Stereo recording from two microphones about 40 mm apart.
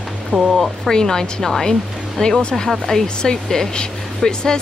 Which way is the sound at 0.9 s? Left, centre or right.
Centre.